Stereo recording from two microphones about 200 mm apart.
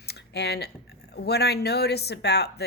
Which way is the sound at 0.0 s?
55° left (ahead or behind).